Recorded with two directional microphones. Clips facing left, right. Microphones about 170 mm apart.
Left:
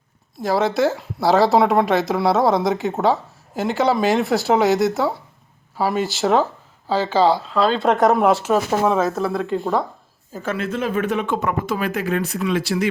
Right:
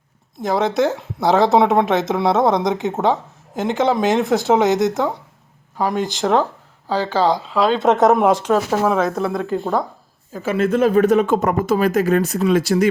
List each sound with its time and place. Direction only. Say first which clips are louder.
0.4 s speech: right 1 dB; centre (ahead or behind)
7.5 s speech: right 1 dB; centre (ahead or behind)
7.8 s speech: right 3 dB; 20° right (ahead or behind)
8.4 s speech: right 1 dB; 5° left (ahead or behind)
10.6 s speech: right 9 dB; 45° right (ahead or behind)